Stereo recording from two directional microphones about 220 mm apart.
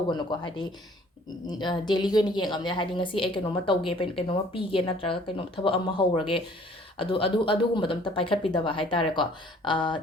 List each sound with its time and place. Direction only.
0.1 s a woman's voice: 20° left (ahead or behind)
6.9 s a woman's voice: 25° left (ahead or behind)